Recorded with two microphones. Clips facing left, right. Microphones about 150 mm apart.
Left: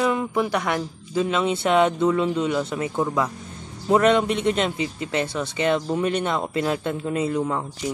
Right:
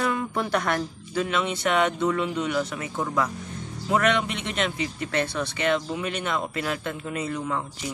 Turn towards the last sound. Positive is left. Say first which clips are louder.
# left 5 dB
turn(degrees=30)  # may be behind; listen again after turning